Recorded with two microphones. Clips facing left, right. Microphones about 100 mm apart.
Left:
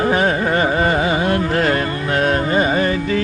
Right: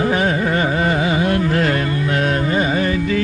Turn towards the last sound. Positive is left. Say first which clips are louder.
# left 1 dB
turn(degrees=40)  # may be behind; listen again after turning